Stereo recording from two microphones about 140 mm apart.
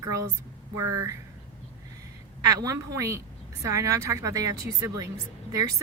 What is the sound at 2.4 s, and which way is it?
Speech, 25° right (ahead or behind).